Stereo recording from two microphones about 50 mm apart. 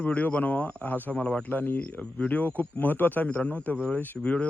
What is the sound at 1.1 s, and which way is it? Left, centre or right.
Speech, left.